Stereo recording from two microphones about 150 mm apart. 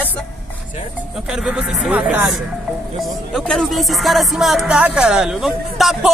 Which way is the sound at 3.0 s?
Centre (ahead or behind).